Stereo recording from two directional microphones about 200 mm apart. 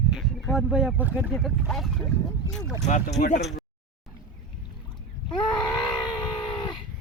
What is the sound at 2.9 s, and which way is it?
Speech, 35° left (ahead or behind).